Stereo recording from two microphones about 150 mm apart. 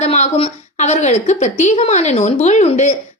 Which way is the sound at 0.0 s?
45° left (ahead or behind).